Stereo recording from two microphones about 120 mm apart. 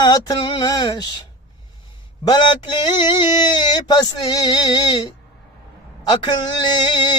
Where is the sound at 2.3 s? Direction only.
40° left (ahead or behind).